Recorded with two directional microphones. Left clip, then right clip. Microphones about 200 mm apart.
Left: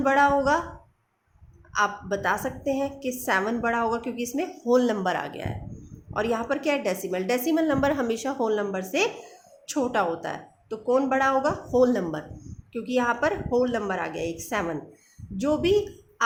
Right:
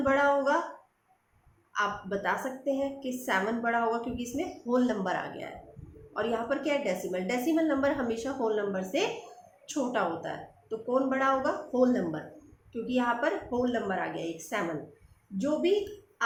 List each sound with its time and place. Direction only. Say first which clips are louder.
0.0 s a woman's voice: left 5 dB; 50° left (ahead or behind)
1.7 s a woman's voice: left 5 dB; 50° left (ahead or behind)